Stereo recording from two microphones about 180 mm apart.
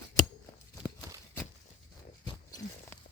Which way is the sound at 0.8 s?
20° left (ahead or behind).